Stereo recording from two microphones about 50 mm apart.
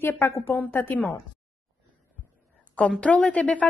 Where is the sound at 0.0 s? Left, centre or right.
Left.